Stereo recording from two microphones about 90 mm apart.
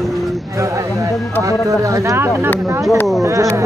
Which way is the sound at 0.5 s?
35° right (ahead or behind).